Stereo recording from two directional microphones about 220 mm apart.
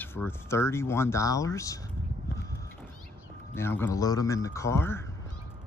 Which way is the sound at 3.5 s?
10° left (ahead or behind).